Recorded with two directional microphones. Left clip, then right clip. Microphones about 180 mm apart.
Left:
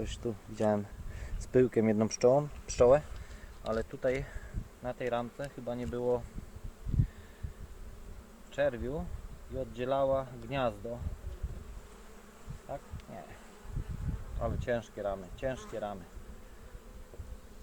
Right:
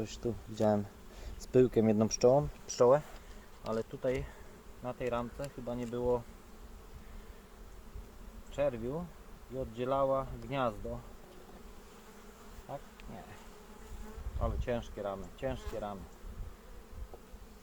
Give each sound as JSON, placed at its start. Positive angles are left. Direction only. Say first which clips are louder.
{"t": 0.5, "sound": "speech", "louder": "even", "side_deg": -20}
{"t": 3.6, "sound": "speech", "louder": "left 2 dB", "side_deg": 10}
{"t": 4.0, "sound": "speech", "louder": "left 2 dB", "side_deg": -10}
{"t": 8.5, "sound": "speech", "louder": "left 2 dB", "side_deg": -5}
{"t": 14.4, "sound": "speech", "louder": "left 3 dB", "side_deg": -10}